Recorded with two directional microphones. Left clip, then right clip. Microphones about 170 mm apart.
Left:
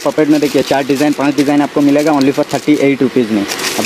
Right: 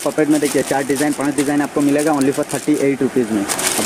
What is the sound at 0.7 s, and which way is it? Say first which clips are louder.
Speech: left 5 dB; 40° left (ahead or behind).